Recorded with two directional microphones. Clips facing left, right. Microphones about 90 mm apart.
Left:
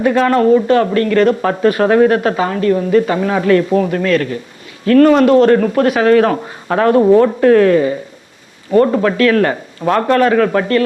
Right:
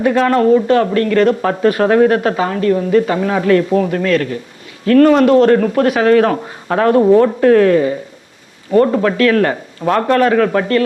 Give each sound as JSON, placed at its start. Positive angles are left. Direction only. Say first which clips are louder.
{"t": 0.0, "sound": "speech", "louder": "even", "side_deg": 20}